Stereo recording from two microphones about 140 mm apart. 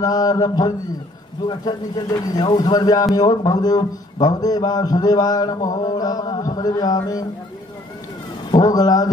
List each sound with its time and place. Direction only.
0.0 s a man's voice: 25° left (ahead or behind)
8.5 s a man's voice: 25° left (ahead or behind)